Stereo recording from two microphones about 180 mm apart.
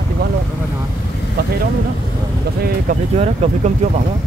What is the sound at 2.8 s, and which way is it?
Speech, 35° right (ahead or behind).